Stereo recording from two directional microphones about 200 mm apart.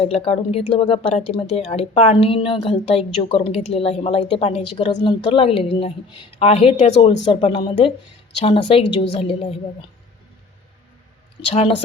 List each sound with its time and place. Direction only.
0.0 s speech: 30° left (ahead or behind)